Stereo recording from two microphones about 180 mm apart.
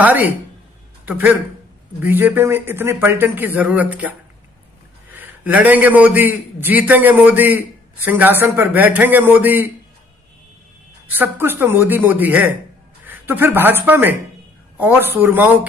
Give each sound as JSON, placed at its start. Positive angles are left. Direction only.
{"t": 0.0, "sound": "a man's voice", "side_deg": -10}
{"t": 5.1, "sound": "a man's voice", "side_deg": -10}
{"t": 11.1, "sound": "a man's voice", "side_deg": -10}